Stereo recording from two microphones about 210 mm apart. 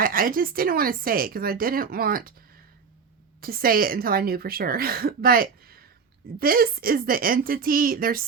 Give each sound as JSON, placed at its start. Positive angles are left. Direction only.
{"t": 0.0, "sound": "speech", "side_deg": -40}
{"t": 3.4, "sound": "speech", "side_deg": -45}